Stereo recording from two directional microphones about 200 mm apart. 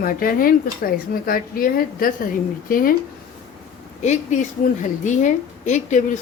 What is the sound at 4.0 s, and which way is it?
A woman's voice, 35° left (ahead or behind).